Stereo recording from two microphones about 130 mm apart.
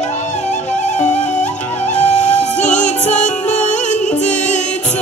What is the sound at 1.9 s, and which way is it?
Music, 65° left (ahead or behind).